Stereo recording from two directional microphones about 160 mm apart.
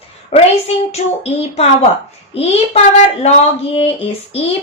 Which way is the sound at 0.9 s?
40° left (ahead or behind).